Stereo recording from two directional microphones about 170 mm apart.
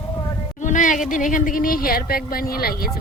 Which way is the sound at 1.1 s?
50° left (ahead or behind).